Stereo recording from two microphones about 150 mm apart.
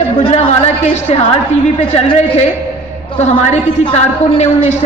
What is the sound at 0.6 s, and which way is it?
Speech, 45° left (ahead or behind).